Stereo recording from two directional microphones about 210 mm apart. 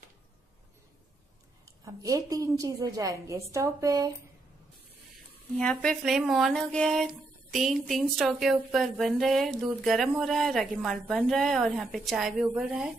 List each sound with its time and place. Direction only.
1.9 s a woman's voice: 15° right (ahead or behind)
5.6 s speech: 5° left (ahead or behind)